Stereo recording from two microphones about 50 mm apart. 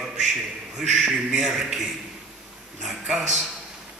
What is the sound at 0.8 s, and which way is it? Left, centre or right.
Speech, centre.